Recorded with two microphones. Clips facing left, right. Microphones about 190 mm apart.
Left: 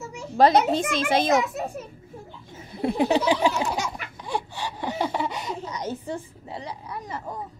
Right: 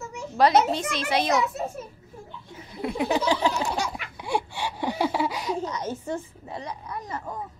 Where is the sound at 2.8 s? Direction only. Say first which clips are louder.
Left 4 dB; 30° left (ahead or behind).